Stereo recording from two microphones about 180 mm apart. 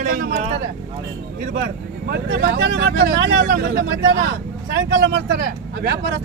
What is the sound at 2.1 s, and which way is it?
Speech, 75° right (ahead or behind).